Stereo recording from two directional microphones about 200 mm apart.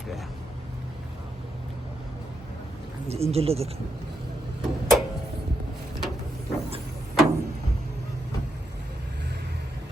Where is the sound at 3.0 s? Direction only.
30° right (ahead or behind).